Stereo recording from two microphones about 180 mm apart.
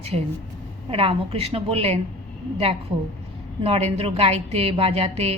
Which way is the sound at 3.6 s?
35° right (ahead or behind).